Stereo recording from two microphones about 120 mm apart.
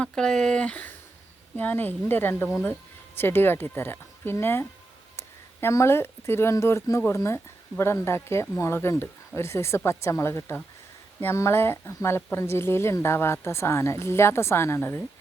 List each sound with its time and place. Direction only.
0.0 s speech: 5° left (ahead or behind)